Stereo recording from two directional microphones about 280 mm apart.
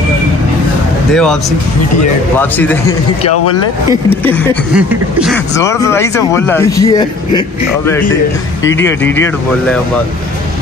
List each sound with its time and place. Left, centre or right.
1.1 s a sound: centre
2.3 s speech: centre
4.2 s speech: centre
4.7 s a sound: centre
5.6 s speech: centre
8.6 s speech: centre